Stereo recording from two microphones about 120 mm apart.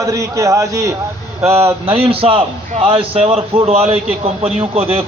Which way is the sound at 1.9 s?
55° right (ahead or behind).